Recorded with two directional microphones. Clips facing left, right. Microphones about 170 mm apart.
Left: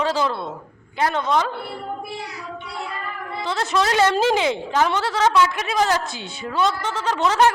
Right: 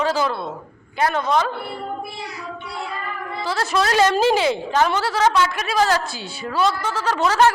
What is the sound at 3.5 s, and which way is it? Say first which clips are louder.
A woman's voice: right 1 dB; 20° left (ahead or behind).